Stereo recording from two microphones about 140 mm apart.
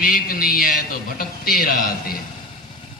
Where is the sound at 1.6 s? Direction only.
90° left.